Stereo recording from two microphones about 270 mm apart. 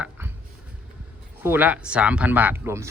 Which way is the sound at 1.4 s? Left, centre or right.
Centre.